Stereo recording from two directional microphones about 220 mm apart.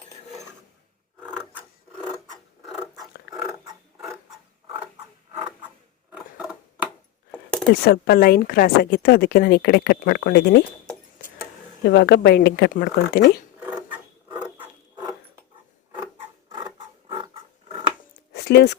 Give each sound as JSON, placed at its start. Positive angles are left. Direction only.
{"t": 3.2, "sound": "a sound", "side_deg": 0}
{"t": 3.9, "sound": "mechanisms", "side_deg": 0}
{"t": 6.1, "sound": "scissors", "side_deg": -5}
{"t": 7.3, "sound": "a sound", "side_deg": 0}
{"t": 7.7, "sound": "speech", "side_deg": 45}
{"t": 11.9, "sound": "speech", "side_deg": 50}
{"t": 16.7, "sound": "a sound", "side_deg": -20}
{"t": 17.7, "sound": "dog", "side_deg": -25}
{"t": 18.3, "sound": "speech", "side_deg": 50}